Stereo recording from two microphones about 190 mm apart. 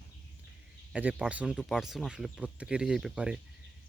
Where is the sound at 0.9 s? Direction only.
5° right (ahead or behind).